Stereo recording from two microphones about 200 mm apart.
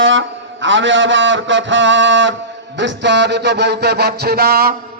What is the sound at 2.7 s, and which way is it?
Mantra, 60° right (ahead or behind).